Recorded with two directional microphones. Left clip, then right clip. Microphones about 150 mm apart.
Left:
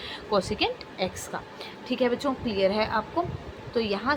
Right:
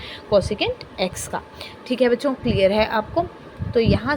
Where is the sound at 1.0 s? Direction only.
40° right (ahead or behind).